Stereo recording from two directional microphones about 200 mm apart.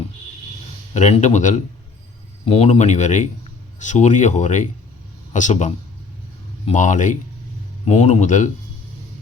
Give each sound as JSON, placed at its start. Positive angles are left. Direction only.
{"t": 0.9, "sound": "a man's voice", "side_deg": 35}
{"t": 6.7, "sound": "a man's voice", "side_deg": 40}